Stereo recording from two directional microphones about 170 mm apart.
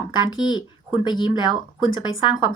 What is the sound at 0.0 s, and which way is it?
A woman's voice, 25° left (ahead or behind).